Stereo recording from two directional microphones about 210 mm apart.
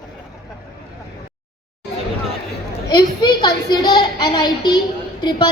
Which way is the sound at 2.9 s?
20° left (ahead or behind).